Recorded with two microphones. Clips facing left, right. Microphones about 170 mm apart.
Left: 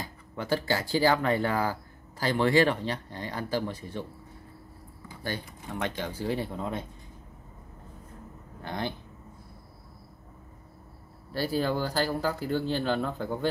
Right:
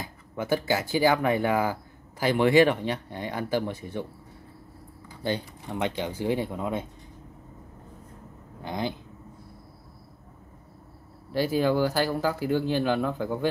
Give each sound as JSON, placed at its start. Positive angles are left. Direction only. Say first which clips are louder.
{"t": 0.0, "sound": "speech", "louder": "right 3 dB", "side_deg": -15}
{"t": 5.2, "sound": "speech", "louder": "right 6 dB", "side_deg": -20}
{"t": 8.6, "sound": "speech", "louder": "right 3 dB", "side_deg": -15}
{"t": 11.3, "sound": "speech", "louder": "right 5 dB", "side_deg": -15}